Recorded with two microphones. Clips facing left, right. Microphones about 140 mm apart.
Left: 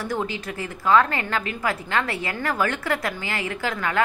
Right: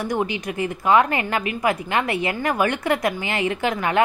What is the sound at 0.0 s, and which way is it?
A woman's voice, 15° right (ahead or behind).